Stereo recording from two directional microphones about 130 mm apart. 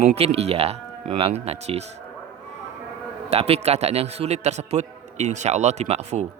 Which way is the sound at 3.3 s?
55° right (ahead or behind).